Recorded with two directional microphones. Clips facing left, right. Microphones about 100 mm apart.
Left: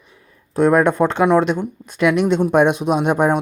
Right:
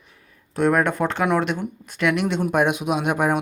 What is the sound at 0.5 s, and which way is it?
Speech, 35° left (ahead or behind).